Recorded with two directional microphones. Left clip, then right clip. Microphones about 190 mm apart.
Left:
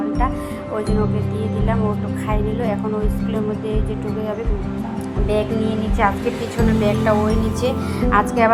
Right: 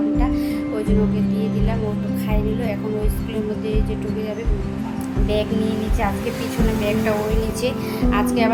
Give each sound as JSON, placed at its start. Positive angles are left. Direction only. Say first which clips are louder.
{"t": 8.1, "sound": "speech", "louder": "left 5 dB", "side_deg": 10}